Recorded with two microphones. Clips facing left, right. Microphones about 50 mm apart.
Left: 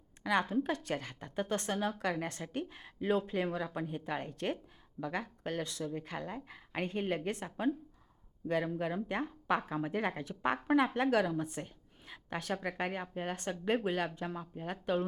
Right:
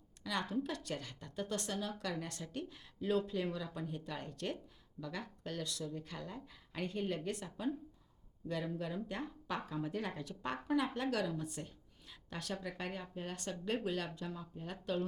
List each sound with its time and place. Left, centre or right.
0.2 s a woman's voice: left